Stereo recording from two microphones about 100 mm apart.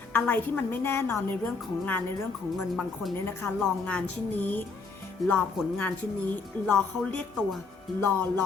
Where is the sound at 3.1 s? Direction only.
25° left (ahead or behind).